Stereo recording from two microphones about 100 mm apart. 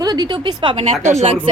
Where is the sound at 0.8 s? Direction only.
90° right.